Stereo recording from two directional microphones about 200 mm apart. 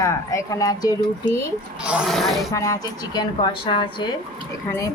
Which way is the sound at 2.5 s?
15° left (ahead or behind).